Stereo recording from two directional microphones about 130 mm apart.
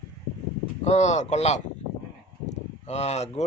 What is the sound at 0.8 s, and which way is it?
A man's voice, 60° left (ahead or behind).